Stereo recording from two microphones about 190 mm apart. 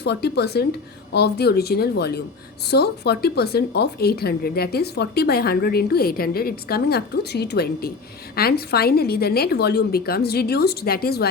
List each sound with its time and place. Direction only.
0.0 s speech: 60° left (ahead or behind)